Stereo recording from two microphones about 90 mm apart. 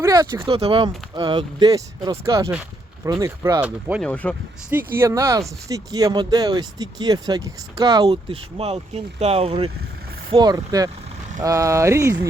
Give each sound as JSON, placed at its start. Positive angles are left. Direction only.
{"t": 0.0, "sound": "a sound", "side_deg": -45}
{"t": 0.4, "sound": "speech", "side_deg": -80}
{"t": 3.6, "sound": "speech", "side_deg": -15}
{"t": 4.0, "sound": "speech", "side_deg": 10}
{"t": 4.7, "sound": "speech", "side_deg": -25}
{"t": 8.0, "sound": "speech", "side_deg": -90}
{"t": 10.3, "sound": "speech", "side_deg": -45}